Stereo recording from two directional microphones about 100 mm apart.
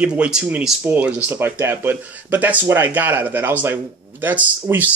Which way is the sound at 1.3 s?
25° right (ahead or behind).